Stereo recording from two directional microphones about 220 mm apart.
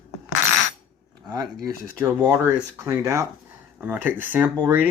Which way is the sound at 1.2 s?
20° right (ahead or behind).